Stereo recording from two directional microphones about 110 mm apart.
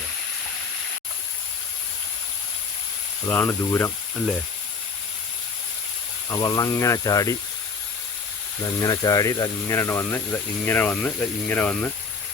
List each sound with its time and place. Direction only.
3.2 s speech: 20° left (ahead or behind)
6.3 s speech: 30° left (ahead or behind)
8.8 s speech: 35° left (ahead or behind); by 11.9 s 15° left (ahead or behind)